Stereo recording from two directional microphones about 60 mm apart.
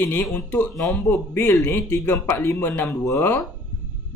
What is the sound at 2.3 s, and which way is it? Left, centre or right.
Speech, left.